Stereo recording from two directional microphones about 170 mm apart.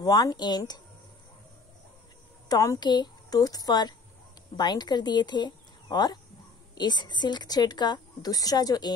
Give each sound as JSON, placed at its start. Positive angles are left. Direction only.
{"t": 0.0, "sound": "a woman's voice", "side_deg": 20}
{"t": 2.4, "sound": "a woman's voice", "side_deg": 20}